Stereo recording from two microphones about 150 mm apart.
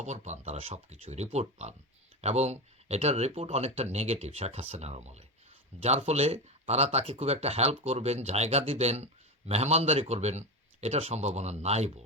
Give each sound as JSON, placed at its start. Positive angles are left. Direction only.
{"t": 0.0, "sound": "speech", "side_deg": -50}